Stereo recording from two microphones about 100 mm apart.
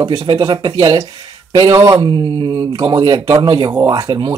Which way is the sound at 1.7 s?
40° right (ahead or behind).